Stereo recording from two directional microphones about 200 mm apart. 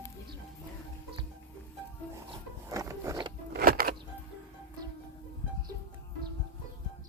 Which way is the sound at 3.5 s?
50° right (ahead or behind).